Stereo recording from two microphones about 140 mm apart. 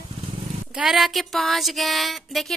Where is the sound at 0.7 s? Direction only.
5° right (ahead or behind).